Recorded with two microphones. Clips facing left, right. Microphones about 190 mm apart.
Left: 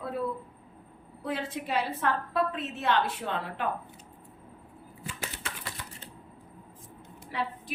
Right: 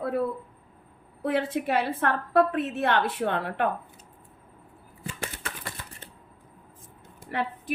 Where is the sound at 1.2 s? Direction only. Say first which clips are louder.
Right 7 dB; 60° right (ahead or behind).